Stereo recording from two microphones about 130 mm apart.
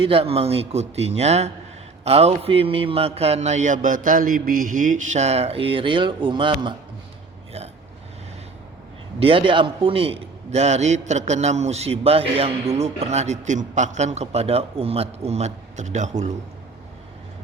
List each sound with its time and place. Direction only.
0.0 s mantra: 45° right (ahead or behind)
9.2 s a man's voice: 40° right (ahead or behind); by 16.3 s 65° right (ahead or behind)